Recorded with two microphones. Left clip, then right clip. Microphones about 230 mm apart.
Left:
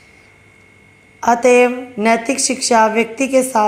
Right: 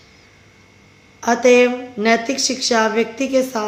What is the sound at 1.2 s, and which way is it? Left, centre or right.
A woman's voice, left.